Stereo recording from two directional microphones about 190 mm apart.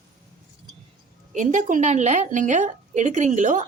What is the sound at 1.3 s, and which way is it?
A woman's voice, 40° right (ahead or behind).